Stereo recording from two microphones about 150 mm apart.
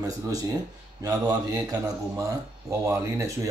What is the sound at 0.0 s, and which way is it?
Speech, 25° right (ahead or behind).